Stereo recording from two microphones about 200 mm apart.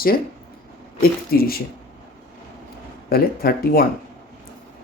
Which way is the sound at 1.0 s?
50° left (ahead or behind).